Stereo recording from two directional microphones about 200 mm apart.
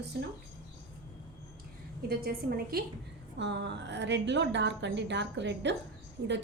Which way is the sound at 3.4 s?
60° right (ahead or behind).